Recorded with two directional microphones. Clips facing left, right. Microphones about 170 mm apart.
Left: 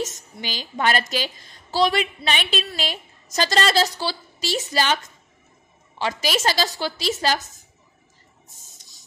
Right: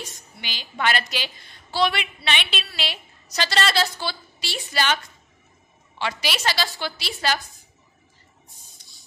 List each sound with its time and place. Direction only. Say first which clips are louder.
0.4 s a woman's voice: left 3 dB; 40° left (ahead or behind)